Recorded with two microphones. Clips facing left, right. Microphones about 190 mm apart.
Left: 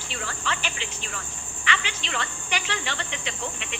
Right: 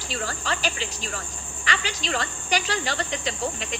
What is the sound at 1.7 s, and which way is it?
Speech, 40° right (ahead or behind).